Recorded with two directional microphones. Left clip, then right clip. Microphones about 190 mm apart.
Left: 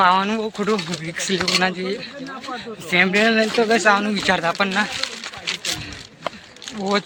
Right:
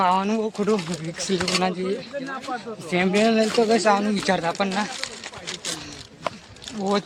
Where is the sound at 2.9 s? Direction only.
10° right (ahead or behind).